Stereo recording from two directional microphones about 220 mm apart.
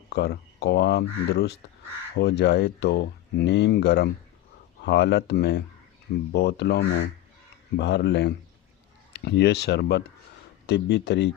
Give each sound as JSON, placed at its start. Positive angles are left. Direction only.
{"t": 0.1, "sound": "speech", "side_deg": 50}